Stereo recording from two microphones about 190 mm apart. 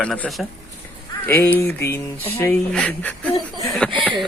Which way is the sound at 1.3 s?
10° left (ahead or behind).